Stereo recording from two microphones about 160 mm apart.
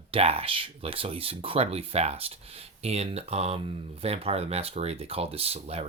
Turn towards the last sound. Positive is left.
turn(degrees=-40)  # may be behind; listen again after turning